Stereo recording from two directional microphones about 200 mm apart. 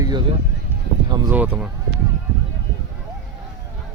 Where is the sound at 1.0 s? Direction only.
20° right (ahead or behind).